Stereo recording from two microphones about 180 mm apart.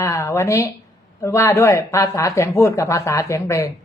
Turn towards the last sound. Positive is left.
turn(degrees=15)  # may be behind; listen again after turning